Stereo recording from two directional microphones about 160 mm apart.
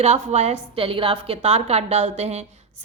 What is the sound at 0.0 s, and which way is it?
A woman's voice, 45° right (ahead or behind).